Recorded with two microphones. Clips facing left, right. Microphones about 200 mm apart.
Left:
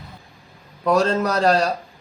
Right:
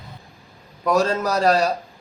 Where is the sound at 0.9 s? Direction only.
10° right (ahead or behind).